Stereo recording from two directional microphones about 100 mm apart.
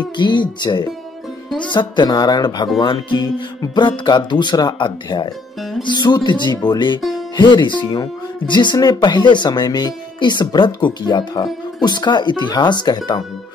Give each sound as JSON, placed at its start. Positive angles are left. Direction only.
{"t": 0.2, "sound": "speech", "side_deg": 50}